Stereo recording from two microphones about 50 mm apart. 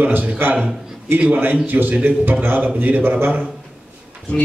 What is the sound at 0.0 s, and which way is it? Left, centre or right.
A man's voice, right.